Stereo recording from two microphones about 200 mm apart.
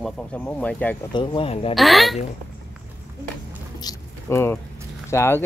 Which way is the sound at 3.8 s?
15° left (ahead or behind).